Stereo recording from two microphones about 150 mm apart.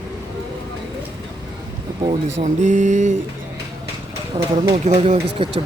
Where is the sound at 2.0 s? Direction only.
45° right (ahead or behind).